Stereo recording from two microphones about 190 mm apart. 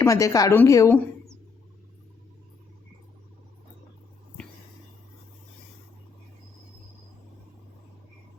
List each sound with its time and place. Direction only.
0.0 s a woman's voice: 15° left (ahead or behind)